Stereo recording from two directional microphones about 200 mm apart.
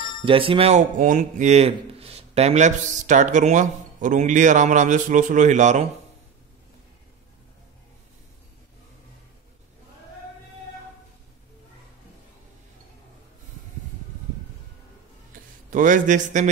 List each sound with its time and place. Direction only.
0.2 s speech: 25° right (ahead or behind)
15.7 s speech: 40° right (ahead or behind)